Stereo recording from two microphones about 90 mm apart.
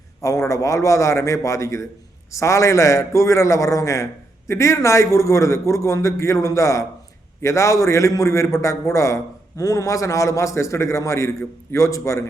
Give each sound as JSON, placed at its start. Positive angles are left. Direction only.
{"t": 0.2, "sound": "a man's voice", "side_deg": 35}